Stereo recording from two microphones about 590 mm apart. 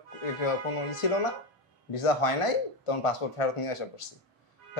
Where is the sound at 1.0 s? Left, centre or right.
Left.